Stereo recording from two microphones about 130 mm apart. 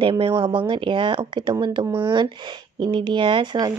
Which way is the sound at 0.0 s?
45° right (ahead or behind).